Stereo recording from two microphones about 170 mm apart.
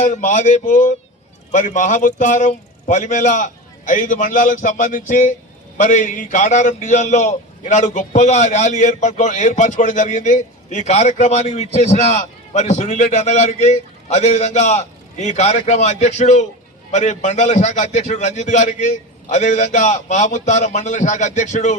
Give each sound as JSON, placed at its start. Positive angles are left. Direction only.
{"t": 0.0, "sound": "a man's voice", "side_deg": 45}